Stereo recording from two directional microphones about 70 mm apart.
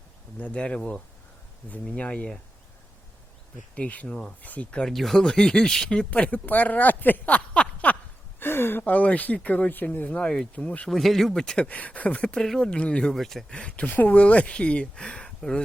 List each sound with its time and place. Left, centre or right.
0.3 s speech: centre
2.0 s speech: centre
3.8 s speech: centre
8.4 s a sound: left
8.8 s speech: left
10.8 s speech: centre